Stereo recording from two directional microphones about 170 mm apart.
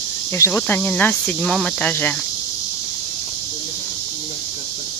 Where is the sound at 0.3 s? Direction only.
15° left (ahead or behind).